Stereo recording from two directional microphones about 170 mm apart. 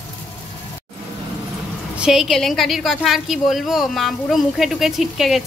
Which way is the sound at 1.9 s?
Centre (ahead or behind).